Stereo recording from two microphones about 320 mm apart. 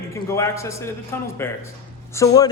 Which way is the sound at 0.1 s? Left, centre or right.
Centre.